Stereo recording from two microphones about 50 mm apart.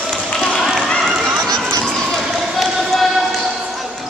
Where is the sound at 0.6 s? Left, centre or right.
Centre.